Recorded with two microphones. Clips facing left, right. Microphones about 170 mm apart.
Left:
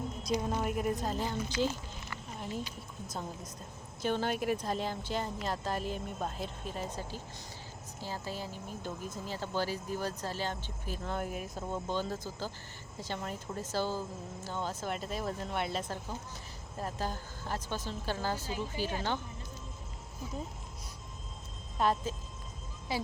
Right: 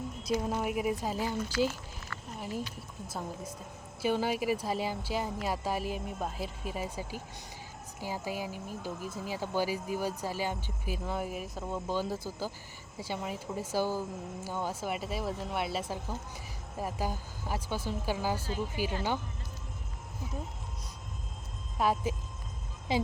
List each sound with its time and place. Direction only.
0.3 s speech: 5° right (ahead or behind)
3.1 s a woman's voice: 5° right (ahead or behind)
21.8 s speech: 10° right (ahead or behind)